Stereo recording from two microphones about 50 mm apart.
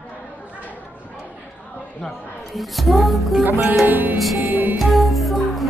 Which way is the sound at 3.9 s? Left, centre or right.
Right.